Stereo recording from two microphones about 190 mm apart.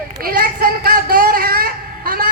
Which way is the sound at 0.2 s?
50° right (ahead or behind).